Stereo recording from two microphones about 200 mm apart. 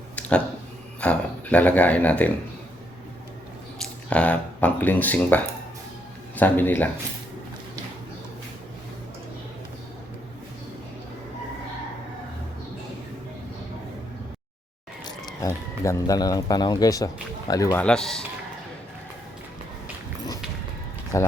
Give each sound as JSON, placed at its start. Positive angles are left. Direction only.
{"t": 0.2, "sound": "a sound", "side_deg": 5}
{"t": 1.0, "sound": "speech", "side_deg": 5}
{"t": 3.8, "sound": "speech", "side_deg": 5}
{"t": 15.0, "sound": "speech", "side_deg": 20}
{"t": 17.7, "sound": "speech", "side_deg": 5}
{"t": 21.1, "sound": "speech", "side_deg": 15}